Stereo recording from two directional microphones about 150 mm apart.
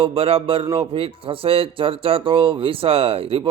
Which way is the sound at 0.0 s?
35° right (ahead or behind).